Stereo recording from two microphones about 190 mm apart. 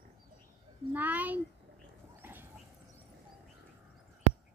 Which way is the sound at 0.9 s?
10° right (ahead or behind).